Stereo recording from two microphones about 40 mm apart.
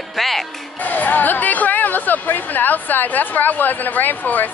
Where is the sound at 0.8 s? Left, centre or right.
Left.